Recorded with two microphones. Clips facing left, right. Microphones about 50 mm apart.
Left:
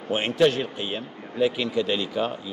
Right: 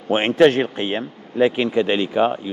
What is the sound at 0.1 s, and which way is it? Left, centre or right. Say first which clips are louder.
Speech: right 6 dB; right.